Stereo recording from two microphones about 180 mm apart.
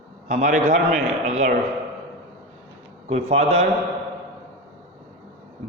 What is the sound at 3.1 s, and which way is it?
Speech, 35° right (ahead or behind).